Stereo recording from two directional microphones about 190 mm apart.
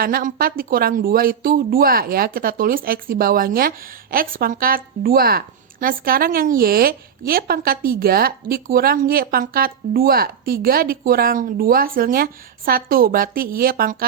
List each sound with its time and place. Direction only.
0.0 s a woman's voice: 50° right (ahead or behind)